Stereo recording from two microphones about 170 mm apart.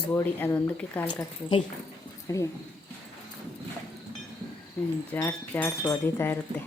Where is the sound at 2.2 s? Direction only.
20° left (ahead or behind).